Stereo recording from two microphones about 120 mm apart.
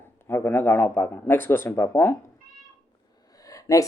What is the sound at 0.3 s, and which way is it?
Speech, 20° left (ahead or behind).